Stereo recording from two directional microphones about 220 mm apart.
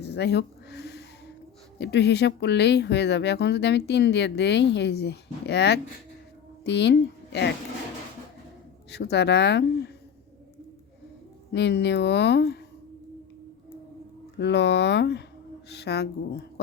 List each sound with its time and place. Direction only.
0.0 s a sound: 50° left (ahead or behind)
1.8 s speech: 50° left (ahead or behind)
8.9 s speech: 50° left (ahead or behind)
11.5 s speech: 50° left (ahead or behind)
14.3 s speech: 50° left (ahead or behind)